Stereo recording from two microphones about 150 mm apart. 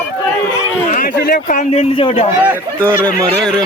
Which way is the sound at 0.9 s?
75° left (ahead or behind).